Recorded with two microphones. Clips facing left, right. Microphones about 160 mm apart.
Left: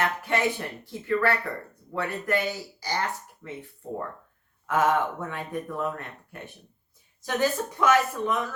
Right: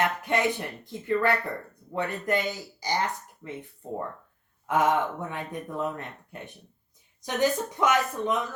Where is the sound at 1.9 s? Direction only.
20° right (ahead or behind).